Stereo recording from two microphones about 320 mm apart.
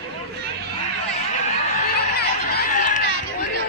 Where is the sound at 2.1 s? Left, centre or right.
Left.